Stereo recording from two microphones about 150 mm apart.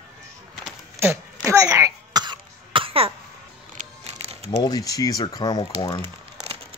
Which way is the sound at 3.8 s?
45° right (ahead or behind).